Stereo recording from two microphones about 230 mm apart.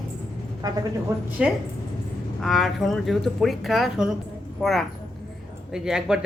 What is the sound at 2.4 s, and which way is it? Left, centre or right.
Speech, centre.